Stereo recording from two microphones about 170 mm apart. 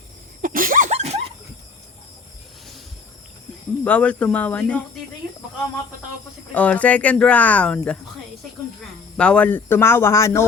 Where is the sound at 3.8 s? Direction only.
10° left (ahead or behind).